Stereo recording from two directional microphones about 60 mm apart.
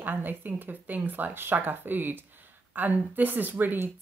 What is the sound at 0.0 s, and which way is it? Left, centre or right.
Speech, right.